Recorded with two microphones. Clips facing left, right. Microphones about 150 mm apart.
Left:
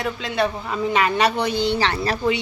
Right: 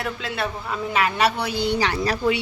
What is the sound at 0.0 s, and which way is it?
A man's voice, 5° right (ahead or behind).